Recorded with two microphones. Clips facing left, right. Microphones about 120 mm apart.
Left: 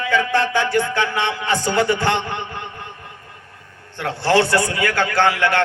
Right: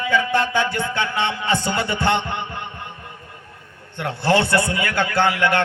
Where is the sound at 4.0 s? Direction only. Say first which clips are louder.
Left 2 dB; 20° right (ahead or behind).